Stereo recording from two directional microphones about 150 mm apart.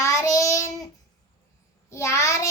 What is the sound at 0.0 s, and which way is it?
Child singing, 20° left (ahead or behind).